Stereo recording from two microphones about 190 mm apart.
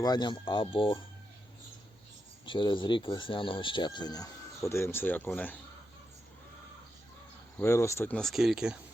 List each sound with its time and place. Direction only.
0.0 s speech: 20° left (ahead or behind)
2.5 s speech: 25° left (ahead or behind); by 5.5 s 10° left (ahead or behind)
7.5 s speech: 15° left (ahead or behind); by 8.8 s 5° right (ahead or behind)